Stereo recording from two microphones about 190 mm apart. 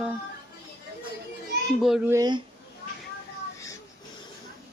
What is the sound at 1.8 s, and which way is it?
Speech, 5° right (ahead or behind).